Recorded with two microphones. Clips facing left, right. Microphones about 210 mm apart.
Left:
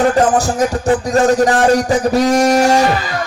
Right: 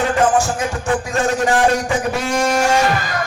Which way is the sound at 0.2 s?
35° left (ahead or behind).